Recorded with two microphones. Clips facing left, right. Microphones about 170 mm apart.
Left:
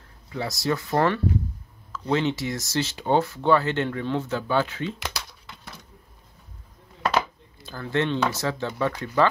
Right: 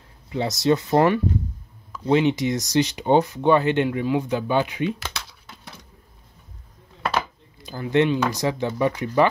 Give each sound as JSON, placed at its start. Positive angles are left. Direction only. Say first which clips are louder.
{"t": 0.3, "sound": "speech", "louder": "right 6 dB", "side_deg": -20}
{"t": 7.1, "sound": "speech", "louder": "left 1 dB", "side_deg": -15}